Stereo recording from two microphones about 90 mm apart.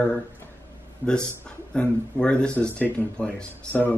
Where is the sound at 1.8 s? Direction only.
10° left (ahead or behind).